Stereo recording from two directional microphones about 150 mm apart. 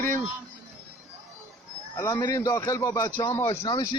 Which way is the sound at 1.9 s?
20° left (ahead or behind).